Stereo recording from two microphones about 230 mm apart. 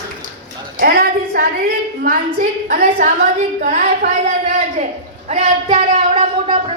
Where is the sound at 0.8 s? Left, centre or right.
Right.